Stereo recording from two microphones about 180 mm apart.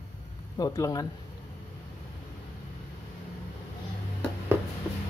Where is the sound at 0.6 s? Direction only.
20° left (ahead or behind).